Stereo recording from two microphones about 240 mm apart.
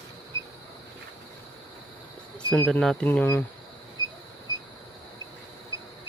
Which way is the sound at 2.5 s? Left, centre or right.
Centre.